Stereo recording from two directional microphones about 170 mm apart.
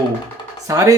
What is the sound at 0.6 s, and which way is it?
Speech, 20° right (ahead or behind).